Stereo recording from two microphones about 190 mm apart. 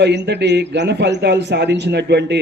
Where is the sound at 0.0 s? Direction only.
65° right (ahead or behind).